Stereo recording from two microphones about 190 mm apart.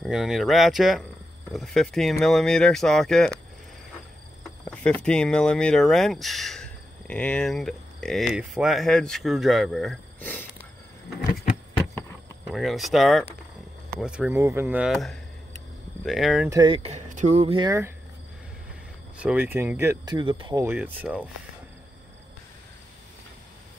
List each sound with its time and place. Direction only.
0.0 s speech: centre (ahead or behind)
4.4 s cricket: 5° left (ahead or behind)
5.0 s speech: 5° left (ahead or behind)
12.4 s speech: centre (ahead or behind)
16.4 s speech: 20° right (ahead or behind)
19.1 s speech: 5° right (ahead or behind); by 20.6 s 25° right (ahead or behind)
20.6 s speech: 10° right (ahead or behind)